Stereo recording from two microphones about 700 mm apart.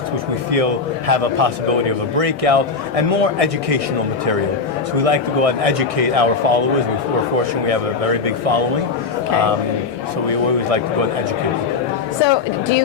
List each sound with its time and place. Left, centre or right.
0.5 s a man's voice: right
5.0 s a man's voice: right
7.7 s a man's voice: right
12.2 s a woman's voice: left